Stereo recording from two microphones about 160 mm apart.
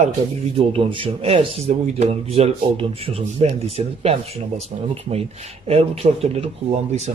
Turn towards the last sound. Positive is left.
turn(degrees=-45)  # may be behind; listen again after turning